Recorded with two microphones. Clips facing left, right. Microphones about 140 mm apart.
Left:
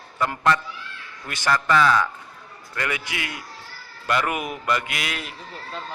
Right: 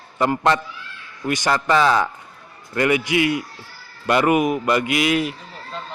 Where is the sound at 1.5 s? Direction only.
25° right (ahead or behind).